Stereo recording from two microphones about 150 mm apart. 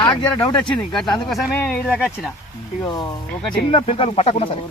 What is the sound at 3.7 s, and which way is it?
Speech, 40° left (ahead or behind).